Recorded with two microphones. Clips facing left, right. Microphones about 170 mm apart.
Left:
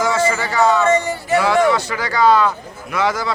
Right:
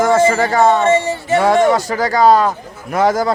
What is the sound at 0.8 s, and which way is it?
Music, 25° right (ahead or behind).